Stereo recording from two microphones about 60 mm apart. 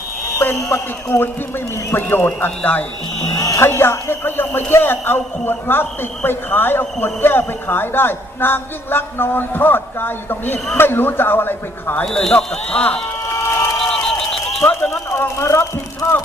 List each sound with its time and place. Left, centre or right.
0.7 s speech: left
1.2 s a man's voice: left
3.2 s speech: left
3.6 s a man's voice: left
12.0 s speech: centre
12.7 s speech: left
13.3 s crowd: left
13.7 s crowd: centre
14.6 s speech: left
15.4 s speech: left